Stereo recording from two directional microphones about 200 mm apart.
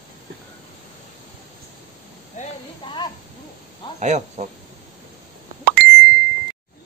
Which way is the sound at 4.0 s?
35° right (ahead or behind).